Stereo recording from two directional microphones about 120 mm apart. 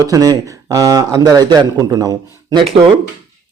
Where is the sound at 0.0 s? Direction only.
30° right (ahead or behind).